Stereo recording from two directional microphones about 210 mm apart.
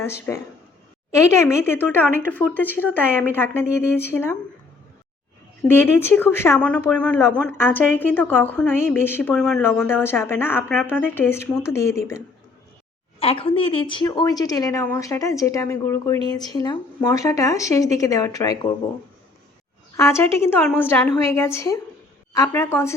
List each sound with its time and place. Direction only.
0.0 s speech: 10° left (ahead or behind)
5.6 s speech: 10° left (ahead or behind)
13.1 s speech: 25° left (ahead or behind)
20.0 s speech: 15° left (ahead or behind)